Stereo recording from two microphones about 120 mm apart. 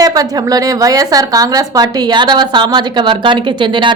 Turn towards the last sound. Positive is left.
turn(degrees=-40)  # may be behind; listen again after turning